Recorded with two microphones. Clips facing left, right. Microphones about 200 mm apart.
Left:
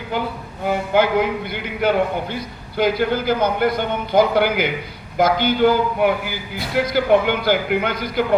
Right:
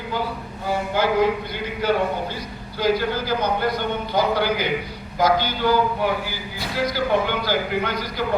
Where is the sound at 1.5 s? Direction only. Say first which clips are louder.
Left 2 dB; 60° left (ahead or behind).